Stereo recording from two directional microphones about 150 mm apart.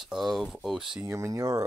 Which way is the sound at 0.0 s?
Centre (ahead or behind).